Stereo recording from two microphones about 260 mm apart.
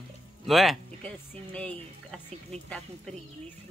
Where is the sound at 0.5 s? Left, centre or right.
Centre.